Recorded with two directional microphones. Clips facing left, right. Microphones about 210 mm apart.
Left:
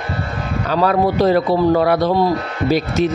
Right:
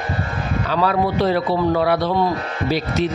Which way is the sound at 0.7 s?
40° left (ahead or behind).